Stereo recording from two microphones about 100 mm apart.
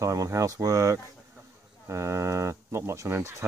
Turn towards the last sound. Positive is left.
turn(degrees=-25)  # may be behind; listen again after turning